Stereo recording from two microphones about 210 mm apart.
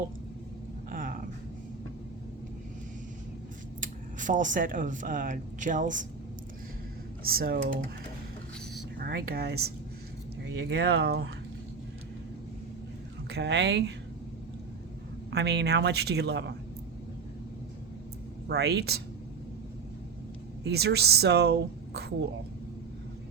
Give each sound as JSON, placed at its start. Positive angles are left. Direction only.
{"t": 0.9, "sound": "a sound", "side_deg": -40}
{"t": 3.8, "sound": "speech", "side_deg": -40}
{"t": 7.3, "sound": "a woman's voice", "side_deg": -45}
{"t": 9.0, "sound": "a woman's voice", "side_deg": -45}
{"t": 13.3, "sound": "speech", "side_deg": -55}
{"t": 15.3, "sound": "a woman's voice", "side_deg": -50}
{"t": 18.4, "sound": "a woman's voice", "side_deg": -50}
{"t": 20.7, "sound": "speech", "side_deg": -50}